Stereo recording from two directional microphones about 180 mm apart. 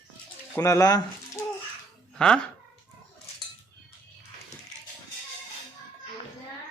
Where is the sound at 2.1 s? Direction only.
5° left (ahead or behind).